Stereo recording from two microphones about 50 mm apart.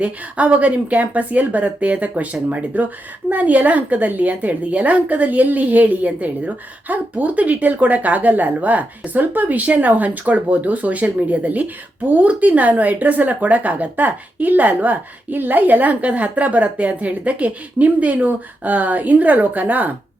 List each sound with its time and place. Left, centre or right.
0.0 s a woman's voice: right